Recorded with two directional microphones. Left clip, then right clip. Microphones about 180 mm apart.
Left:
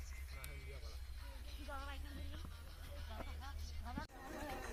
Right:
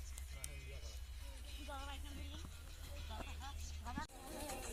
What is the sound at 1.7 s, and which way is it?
Music, centre (ahead or behind).